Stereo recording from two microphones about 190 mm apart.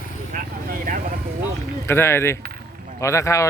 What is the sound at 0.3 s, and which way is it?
Vehicle, 45° right (ahead or behind).